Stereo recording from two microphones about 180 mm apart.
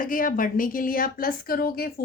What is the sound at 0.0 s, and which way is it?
A woman's voice, 50° left (ahead or behind).